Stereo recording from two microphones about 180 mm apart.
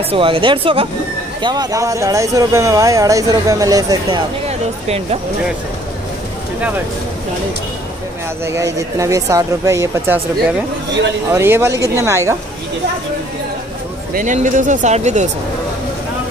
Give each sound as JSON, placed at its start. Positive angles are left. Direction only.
{"t": 0.1, "sound": "speech", "side_deg": -30}
{"t": 4.5, "sound": "speech", "side_deg": -35}
{"t": 8.5, "sound": "speech", "side_deg": -15}
{"t": 11.3, "sound": "speech", "side_deg": -15}
{"t": 14.1, "sound": "speech", "side_deg": -45}